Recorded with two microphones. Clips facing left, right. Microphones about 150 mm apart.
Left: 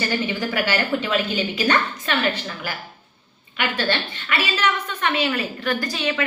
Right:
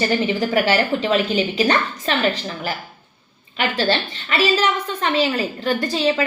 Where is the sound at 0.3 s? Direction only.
40° right (ahead or behind).